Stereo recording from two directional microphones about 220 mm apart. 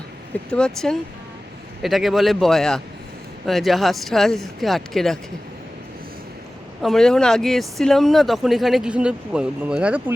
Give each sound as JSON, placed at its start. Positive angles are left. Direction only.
{"t": 0.5, "sound": "speech", "side_deg": 5}
{"t": 6.8, "sound": "speech", "side_deg": 0}